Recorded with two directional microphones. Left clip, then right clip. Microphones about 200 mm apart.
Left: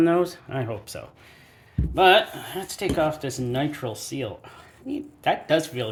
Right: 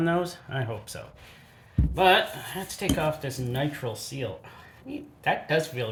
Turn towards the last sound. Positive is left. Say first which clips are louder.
# left 3 dB
turn(degrees=40)  # may be behind; listen again after turning